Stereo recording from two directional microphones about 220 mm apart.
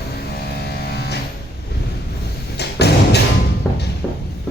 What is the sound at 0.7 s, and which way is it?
Vehicle, 45° left (ahead or behind).